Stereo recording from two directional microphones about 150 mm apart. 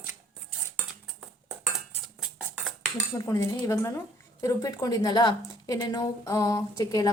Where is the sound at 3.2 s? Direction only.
20° left (ahead or behind).